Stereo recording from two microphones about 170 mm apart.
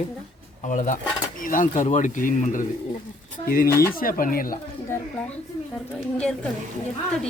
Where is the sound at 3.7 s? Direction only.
15° left (ahead or behind).